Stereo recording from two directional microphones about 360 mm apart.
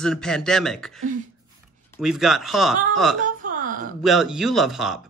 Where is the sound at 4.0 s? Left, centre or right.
Centre.